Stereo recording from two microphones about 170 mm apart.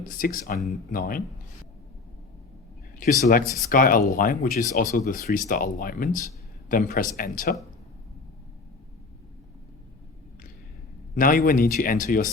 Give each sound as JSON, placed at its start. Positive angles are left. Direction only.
{"t": 0.1, "sound": "speech", "side_deg": 55}
{"t": 3.0, "sound": "speech", "side_deg": 55}
{"t": 11.1, "sound": "speech", "side_deg": 55}